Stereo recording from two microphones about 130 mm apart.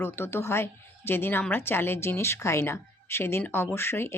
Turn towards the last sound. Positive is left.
turn(degrees=20)  # may be behind; listen again after turning